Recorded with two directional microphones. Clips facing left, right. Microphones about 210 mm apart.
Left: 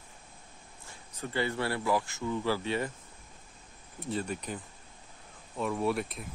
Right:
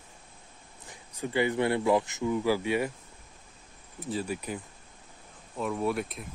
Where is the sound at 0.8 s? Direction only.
15° right (ahead or behind).